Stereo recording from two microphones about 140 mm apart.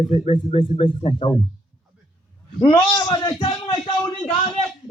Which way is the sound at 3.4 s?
40° left (ahead or behind).